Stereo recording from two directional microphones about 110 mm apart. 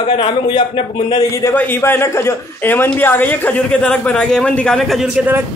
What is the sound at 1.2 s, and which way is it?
Speech, 30° left (ahead or behind).